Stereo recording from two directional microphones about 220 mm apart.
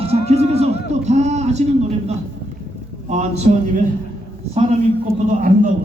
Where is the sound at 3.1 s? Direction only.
30° right (ahead or behind).